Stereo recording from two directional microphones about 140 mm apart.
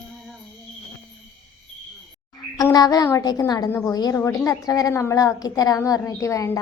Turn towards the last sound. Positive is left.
turn(degrees=20)  # may be behind; listen again after turning